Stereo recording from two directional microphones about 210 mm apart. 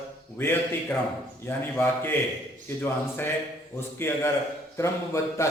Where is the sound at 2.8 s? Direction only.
10° left (ahead or behind).